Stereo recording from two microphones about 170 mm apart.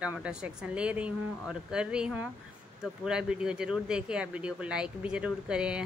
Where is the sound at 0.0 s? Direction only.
5° right (ahead or behind).